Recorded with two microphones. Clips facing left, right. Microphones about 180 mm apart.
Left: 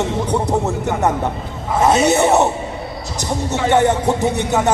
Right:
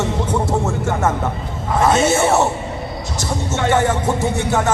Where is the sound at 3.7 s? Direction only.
20° left (ahead or behind).